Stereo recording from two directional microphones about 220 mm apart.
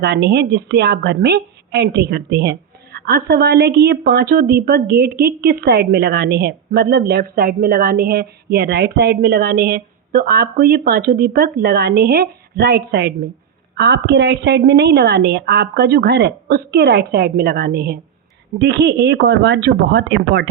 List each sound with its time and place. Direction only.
0.0 s a woman's voice: 50° right (ahead or behind)